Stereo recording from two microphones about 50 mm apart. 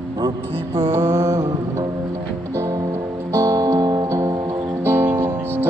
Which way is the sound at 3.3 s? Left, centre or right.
Right.